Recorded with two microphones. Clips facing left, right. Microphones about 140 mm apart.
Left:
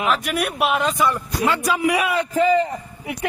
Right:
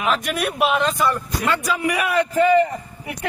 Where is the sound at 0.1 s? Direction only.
Centre (ahead or behind).